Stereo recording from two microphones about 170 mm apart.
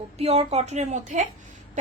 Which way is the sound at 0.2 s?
35° right (ahead or behind).